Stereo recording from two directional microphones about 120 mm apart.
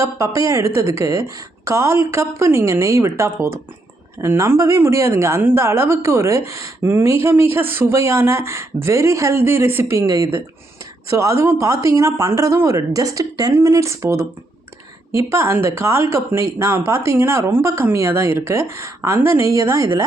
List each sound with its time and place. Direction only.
0.0 s a woman's voice: 25° right (ahead or behind)